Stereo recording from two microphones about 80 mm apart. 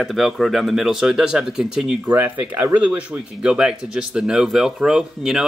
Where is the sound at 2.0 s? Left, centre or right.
Right; by 5.4 s centre.